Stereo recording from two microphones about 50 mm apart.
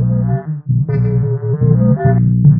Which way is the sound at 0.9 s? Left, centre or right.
Centre.